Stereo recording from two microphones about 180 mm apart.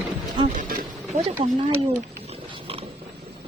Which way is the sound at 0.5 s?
50° right (ahead or behind).